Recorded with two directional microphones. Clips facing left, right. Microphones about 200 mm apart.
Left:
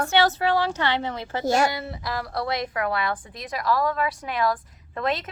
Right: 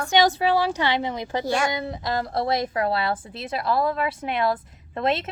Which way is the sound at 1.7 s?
20° right (ahead or behind).